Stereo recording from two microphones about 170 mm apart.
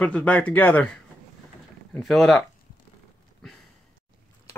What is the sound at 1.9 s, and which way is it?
Speech, centre (ahead or behind).